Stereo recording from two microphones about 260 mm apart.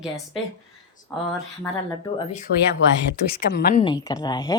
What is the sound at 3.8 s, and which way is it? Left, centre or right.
Speech, centre.